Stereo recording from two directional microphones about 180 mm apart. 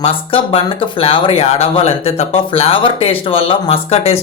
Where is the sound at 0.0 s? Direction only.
30° left (ahead or behind).